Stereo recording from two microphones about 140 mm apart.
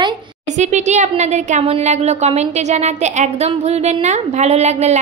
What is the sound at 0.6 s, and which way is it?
A woman's voice, 55° right (ahead or behind).